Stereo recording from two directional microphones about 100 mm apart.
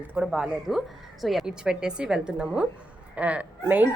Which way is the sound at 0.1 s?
5° right (ahead or behind).